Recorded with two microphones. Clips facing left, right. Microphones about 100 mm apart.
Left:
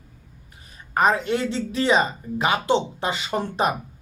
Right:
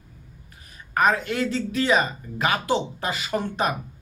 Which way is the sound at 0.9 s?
25° left (ahead or behind).